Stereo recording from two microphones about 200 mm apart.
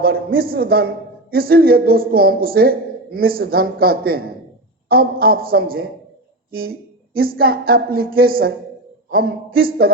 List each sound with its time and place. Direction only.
0.0 s speech: 50° right (ahead or behind)